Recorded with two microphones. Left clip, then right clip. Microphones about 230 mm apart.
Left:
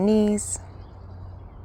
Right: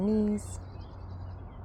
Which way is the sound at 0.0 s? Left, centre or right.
Left.